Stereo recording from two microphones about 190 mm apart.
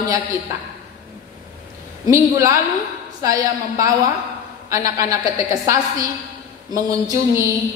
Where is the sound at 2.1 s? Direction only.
15° right (ahead or behind).